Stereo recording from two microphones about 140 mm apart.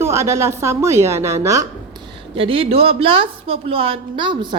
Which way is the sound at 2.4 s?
40° right (ahead or behind).